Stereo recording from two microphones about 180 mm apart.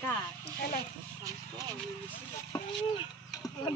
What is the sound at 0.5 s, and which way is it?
Speech, 55° left (ahead or behind).